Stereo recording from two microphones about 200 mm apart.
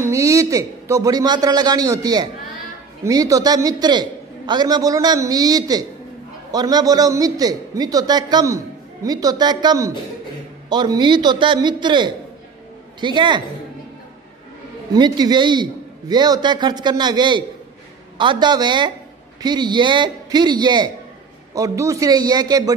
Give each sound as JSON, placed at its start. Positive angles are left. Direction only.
{"t": 0.0, "sound": "a man's voice", "side_deg": -15}
{"t": 14.9, "sound": "a man's voice", "side_deg": -20}